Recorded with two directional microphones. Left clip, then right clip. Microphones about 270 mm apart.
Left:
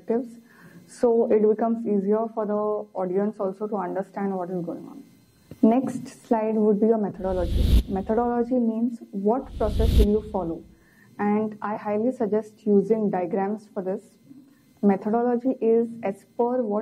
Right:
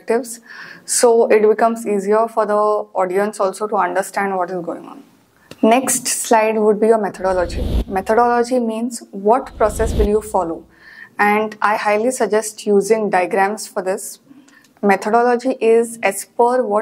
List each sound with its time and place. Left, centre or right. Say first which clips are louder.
0.0 s speech: right 8 dB; centre
3.1 s speech: right 9 dB; centre